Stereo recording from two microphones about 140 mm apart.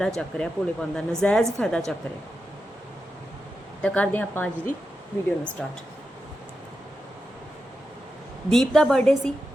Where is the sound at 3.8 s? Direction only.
10° left (ahead or behind).